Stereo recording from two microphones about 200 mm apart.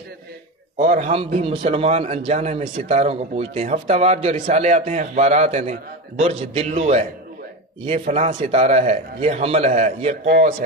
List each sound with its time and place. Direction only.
0.7 s a man's voice: 40° right (ahead or behind)